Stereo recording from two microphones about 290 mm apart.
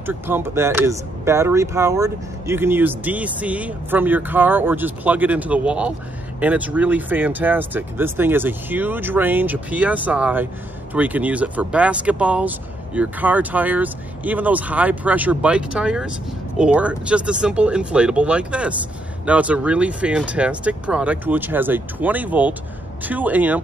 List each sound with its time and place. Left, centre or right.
0.0 s speech: centre